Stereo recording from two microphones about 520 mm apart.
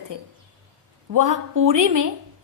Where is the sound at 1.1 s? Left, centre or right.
Right.